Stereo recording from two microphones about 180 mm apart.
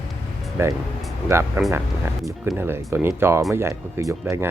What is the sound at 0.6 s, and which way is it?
Speech, 15° right (ahead or behind).